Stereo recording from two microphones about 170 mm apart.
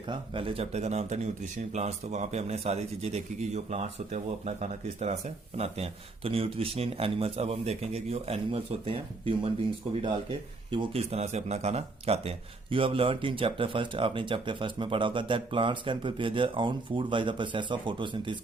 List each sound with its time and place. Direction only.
0.1 s a man's voice: 30° right (ahead or behind)
10.7 s a man's voice: 30° right (ahead or behind)